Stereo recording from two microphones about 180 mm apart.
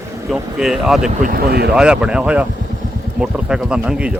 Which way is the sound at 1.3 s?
60° right (ahead or behind).